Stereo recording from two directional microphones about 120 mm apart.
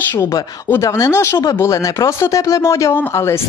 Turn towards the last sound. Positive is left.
turn(degrees=20)  # may be behind; listen again after turning